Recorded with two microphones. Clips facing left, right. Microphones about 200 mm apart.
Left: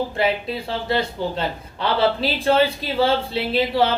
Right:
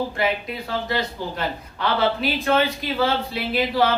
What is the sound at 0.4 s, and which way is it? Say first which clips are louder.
Speech: left 2 dB; 30° left (ahead or behind).